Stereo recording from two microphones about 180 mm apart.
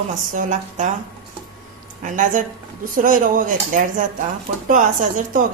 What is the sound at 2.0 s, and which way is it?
A woman's voice, 45° right (ahead or behind).